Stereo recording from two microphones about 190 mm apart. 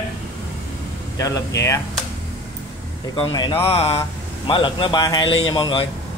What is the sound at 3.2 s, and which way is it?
A man's voice, 25° left (ahead or behind).